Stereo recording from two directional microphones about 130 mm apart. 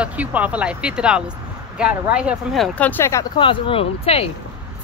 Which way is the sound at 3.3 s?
40° left (ahead or behind).